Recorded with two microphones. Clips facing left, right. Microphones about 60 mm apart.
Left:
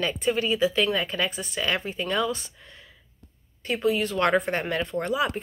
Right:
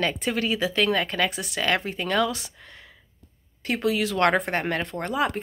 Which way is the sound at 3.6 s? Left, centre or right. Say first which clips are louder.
Even; right.